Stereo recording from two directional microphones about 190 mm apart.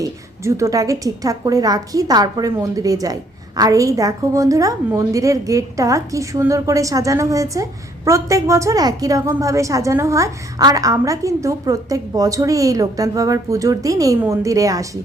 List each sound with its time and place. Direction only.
0.0 s a woman's voice: 15° right (ahead or behind)